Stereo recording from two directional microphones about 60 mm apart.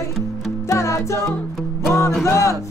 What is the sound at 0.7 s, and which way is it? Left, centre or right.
Music, left.